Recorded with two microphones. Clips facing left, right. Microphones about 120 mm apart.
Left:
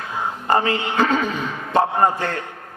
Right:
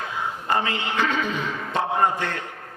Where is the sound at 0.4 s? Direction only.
40° left (ahead or behind).